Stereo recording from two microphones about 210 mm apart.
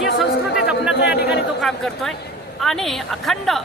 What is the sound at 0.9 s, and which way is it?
Speech, 55° left (ahead or behind).